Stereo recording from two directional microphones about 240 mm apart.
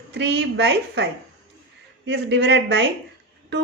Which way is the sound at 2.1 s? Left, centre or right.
Right.